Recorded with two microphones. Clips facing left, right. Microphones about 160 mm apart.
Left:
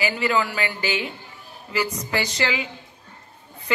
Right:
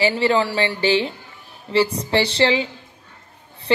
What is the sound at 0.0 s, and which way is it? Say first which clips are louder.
Speech: right 5 dB; 30° right (ahead or behind).